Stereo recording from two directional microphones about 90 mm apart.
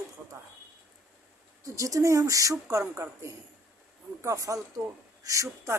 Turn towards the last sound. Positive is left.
turn(degrees=-35)  # may be behind; listen again after turning